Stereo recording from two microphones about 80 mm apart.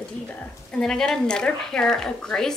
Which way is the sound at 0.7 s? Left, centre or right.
Centre.